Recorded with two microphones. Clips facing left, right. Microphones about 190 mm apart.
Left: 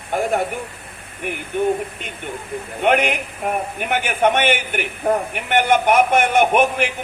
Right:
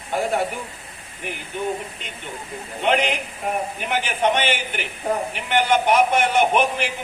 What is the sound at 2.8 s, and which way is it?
A man's voice, 55° left (ahead or behind).